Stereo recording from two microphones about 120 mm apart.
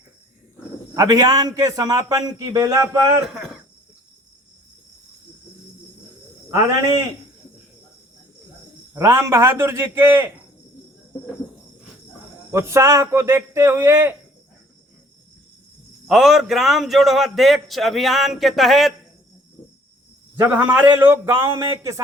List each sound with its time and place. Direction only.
0.9 s a man's voice: 35° right (ahead or behind)
3.3 s speech: centre (ahead or behind)
9.0 s a man's voice: 25° right (ahead or behind)
12.5 s a man's voice: 20° right (ahead or behind)
16.0 s a man's voice: 5° right (ahead or behind)
20.5 s speech: 10° right (ahead or behind)